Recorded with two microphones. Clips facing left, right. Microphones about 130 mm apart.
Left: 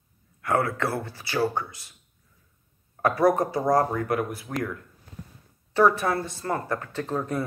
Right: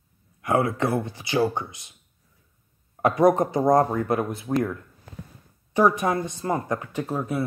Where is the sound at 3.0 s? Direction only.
20° right (ahead or behind).